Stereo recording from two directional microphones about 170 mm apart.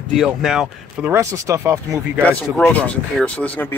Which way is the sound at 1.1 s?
20° right (ahead or behind).